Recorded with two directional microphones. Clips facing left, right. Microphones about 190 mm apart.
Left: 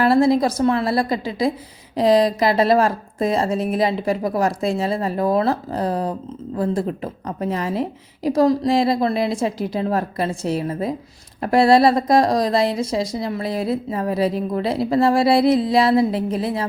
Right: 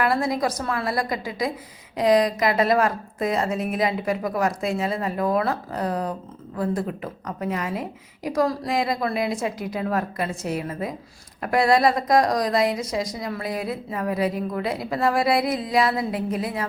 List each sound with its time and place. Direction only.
0.0 s a woman's voice: 30° left (ahead or behind)